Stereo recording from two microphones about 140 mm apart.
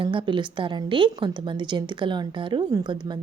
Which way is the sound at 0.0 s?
35° right (ahead or behind).